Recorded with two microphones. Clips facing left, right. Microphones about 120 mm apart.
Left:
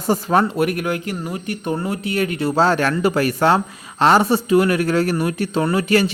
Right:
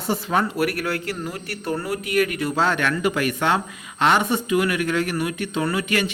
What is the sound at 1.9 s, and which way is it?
Speech, 30° left (ahead or behind).